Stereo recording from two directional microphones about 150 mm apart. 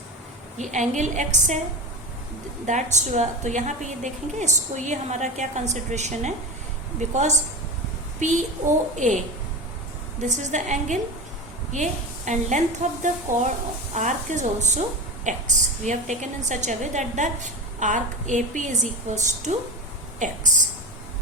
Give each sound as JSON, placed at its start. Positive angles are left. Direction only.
{"t": 0.7, "sound": "a woman's voice", "side_deg": -55}
{"t": 2.6, "sound": "a woman's voice", "side_deg": -50}